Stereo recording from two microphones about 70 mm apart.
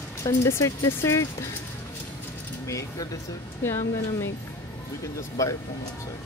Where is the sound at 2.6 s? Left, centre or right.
Left.